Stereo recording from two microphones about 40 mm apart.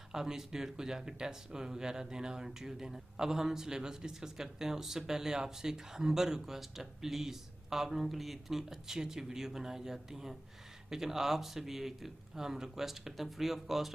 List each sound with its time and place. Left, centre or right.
0.1 s speech: centre